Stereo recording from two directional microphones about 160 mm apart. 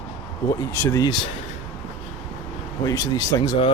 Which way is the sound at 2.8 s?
20° left (ahead or behind).